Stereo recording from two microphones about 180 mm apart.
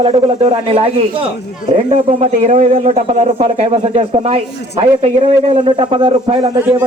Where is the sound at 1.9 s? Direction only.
45° right (ahead or behind); by 6.8 s 30° right (ahead or behind).